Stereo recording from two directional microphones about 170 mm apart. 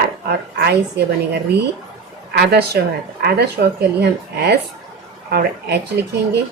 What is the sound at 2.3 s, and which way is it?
A woman's voice, 80° right.